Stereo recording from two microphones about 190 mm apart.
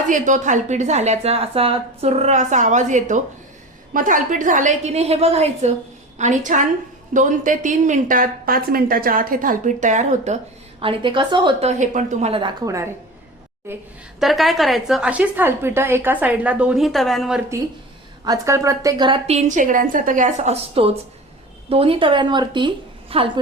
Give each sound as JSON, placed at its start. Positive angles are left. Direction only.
{"t": 0.1, "sound": "speech", "side_deg": -40}
{"t": 11.7, "sound": "a woman's voice", "side_deg": -40}
{"t": 14.2, "sound": "a woman's voice", "side_deg": 0}
{"t": 18.3, "sound": "a woman's voice", "side_deg": -15}